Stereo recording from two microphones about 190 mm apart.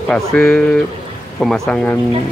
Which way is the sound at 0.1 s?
5° left (ahead or behind).